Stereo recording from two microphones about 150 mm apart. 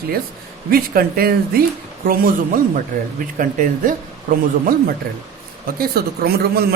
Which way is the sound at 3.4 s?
65° right (ahead or behind).